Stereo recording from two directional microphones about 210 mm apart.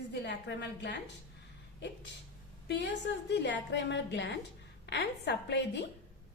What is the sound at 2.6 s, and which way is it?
A woman's voice, 55° left (ahead or behind).